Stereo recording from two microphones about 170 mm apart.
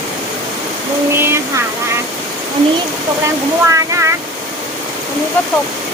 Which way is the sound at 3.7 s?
20° right (ahead or behind).